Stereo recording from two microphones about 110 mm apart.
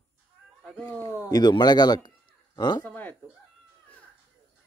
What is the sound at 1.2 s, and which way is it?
Speech, 40° left (ahead or behind).